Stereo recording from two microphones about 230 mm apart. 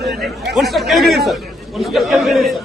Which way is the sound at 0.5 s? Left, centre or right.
Centre.